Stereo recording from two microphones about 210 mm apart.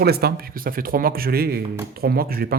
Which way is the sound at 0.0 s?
50° right (ahead or behind).